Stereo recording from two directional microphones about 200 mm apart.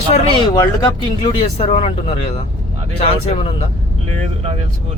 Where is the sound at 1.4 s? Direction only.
35° left (ahead or behind).